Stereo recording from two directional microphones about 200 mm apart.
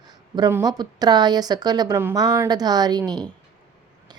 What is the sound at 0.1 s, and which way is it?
Speech, 20° right (ahead or behind).